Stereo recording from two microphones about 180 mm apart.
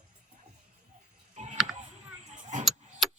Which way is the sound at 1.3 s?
40° right (ahead or behind).